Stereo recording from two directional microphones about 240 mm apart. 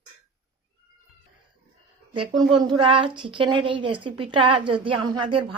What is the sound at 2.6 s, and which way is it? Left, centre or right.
Speech, centre.